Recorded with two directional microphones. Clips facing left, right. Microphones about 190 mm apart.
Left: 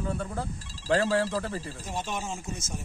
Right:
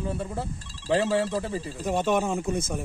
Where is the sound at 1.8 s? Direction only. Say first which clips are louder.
Right 13 dB; 60° right (ahead or behind).